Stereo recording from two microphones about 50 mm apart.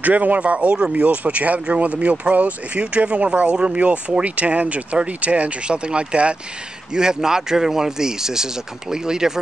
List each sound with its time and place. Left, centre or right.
0.0 s speech: right; by 9.4 s centre